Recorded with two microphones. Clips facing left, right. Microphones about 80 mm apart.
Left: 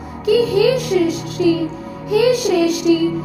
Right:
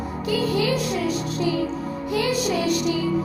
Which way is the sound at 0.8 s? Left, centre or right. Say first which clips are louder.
Left 9 dB; left.